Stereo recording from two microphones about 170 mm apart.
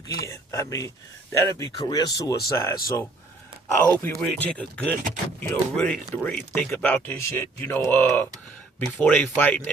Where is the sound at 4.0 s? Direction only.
10° left (ahead or behind).